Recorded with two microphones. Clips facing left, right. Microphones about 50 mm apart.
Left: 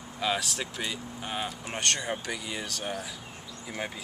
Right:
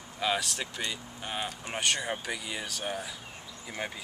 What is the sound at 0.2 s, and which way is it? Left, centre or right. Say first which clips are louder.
Speech: even; centre.